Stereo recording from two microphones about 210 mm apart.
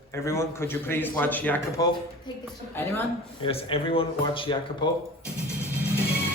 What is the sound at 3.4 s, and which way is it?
Speech, 25° left (ahead or behind).